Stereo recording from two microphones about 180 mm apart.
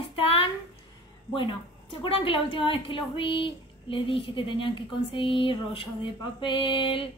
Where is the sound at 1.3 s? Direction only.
25° left (ahead or behind).